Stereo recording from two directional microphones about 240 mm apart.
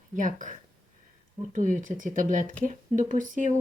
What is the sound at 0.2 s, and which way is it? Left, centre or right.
Speech, right.